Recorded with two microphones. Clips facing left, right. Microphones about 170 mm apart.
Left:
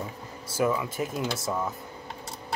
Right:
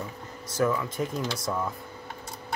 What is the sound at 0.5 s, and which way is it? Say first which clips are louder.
Speech: even; 10° left (ahead or behind).